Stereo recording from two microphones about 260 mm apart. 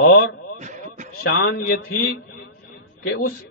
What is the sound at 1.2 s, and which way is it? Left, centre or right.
Speech, left.